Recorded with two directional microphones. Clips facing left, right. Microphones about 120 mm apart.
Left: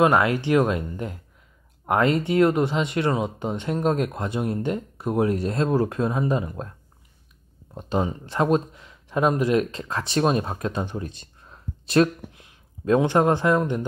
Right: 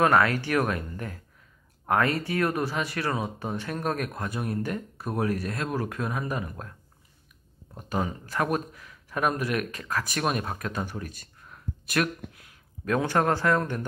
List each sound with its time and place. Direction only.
0.0 s speech: 20° left (ahead or behind)
7.7 s speech: 25° left (ahead or behind)